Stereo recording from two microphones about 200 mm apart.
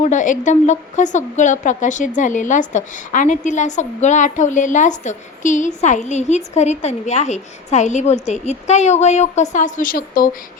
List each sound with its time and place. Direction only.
0.0 s a woman's voice: 40° left (ahead or behind)